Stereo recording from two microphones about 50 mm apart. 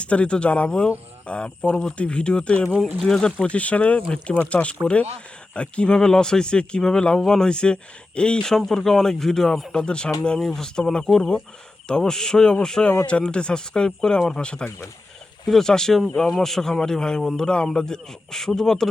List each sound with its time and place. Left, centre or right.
0.0 s speech: left
3.3 s speech: left
15.4 s speech: centre